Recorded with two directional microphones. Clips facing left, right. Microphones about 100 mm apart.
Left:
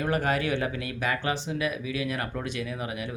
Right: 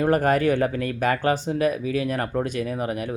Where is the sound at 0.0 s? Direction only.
45° right (ahead or behind).